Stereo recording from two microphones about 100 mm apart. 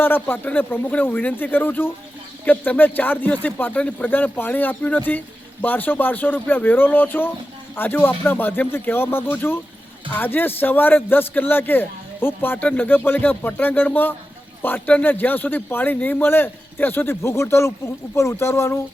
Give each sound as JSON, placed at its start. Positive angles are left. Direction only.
{"t": 0.0, "sound": "speech", "side_deg": 20}